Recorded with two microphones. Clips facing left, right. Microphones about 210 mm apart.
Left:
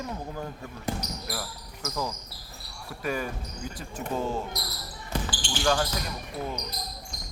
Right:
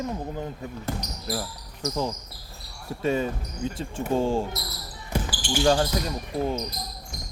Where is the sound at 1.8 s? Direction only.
25° right (ahead or behind).